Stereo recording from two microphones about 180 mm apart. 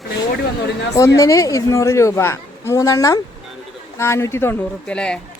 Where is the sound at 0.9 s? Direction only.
20° left (ahead or behind).